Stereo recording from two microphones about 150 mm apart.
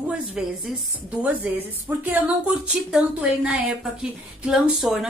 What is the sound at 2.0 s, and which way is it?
A woman's voice, 10° right (ahead or behind).